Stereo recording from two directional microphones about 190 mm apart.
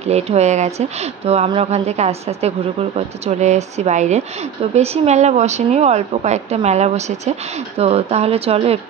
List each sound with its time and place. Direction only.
0.0 s speech: 35° right (ahead or behind)